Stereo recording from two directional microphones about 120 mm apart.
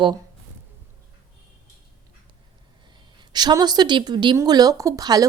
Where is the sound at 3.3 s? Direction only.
35° right (ahead or behind).